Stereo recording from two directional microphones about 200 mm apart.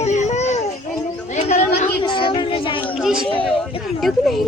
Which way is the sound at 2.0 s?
25° left (ahead or behind).